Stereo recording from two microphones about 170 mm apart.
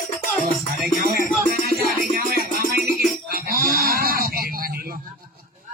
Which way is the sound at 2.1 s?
60° right (ahead or behind).